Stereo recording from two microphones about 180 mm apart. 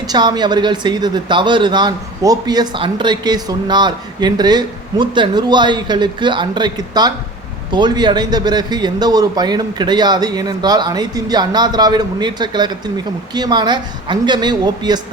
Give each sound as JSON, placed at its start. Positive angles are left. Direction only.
{"t": 0.1, "sound": "speech", "side_deg": -25}